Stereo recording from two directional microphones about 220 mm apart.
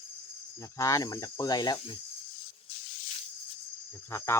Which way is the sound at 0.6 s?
15° left (ahead or behind).